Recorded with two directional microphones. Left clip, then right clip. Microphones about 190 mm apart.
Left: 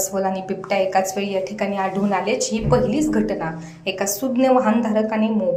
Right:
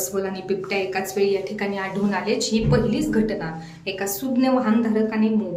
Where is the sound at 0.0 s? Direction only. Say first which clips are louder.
Left 4 dB; 15° left (ahead or behind).